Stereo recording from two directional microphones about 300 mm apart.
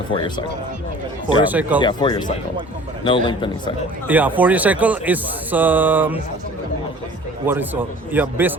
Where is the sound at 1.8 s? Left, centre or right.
Centre.